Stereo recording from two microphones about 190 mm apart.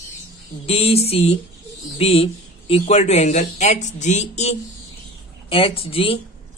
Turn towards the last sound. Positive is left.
turn(degrees=30)  # may be behind; listen again after turning